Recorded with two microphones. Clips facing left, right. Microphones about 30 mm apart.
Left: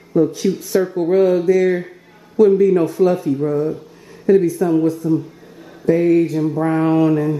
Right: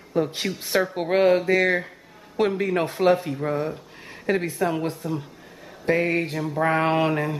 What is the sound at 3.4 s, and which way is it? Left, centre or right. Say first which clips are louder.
Speech: left 7 dB; right.